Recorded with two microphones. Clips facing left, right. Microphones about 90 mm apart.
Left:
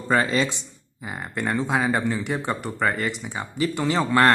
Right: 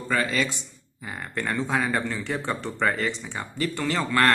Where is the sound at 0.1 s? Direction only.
30° left (ahead or behind).